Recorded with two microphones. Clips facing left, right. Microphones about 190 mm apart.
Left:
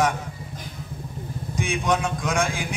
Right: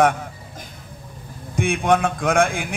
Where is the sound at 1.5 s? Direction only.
55° right (ahead or behind).